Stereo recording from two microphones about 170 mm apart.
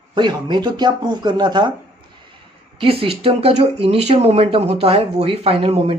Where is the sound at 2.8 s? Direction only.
35° right (ahead or behind).